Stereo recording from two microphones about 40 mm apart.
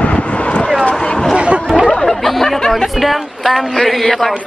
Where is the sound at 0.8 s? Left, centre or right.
Left.